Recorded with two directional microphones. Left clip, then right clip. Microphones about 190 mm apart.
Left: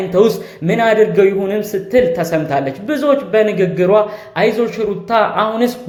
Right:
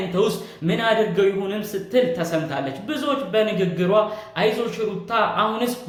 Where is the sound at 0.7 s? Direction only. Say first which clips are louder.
Left 8 dB; 35° left (ahead or behind).